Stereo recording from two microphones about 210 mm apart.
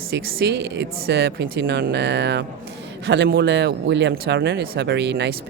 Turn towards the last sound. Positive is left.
turn(degrees=-55)  # may be behind; listen again after turning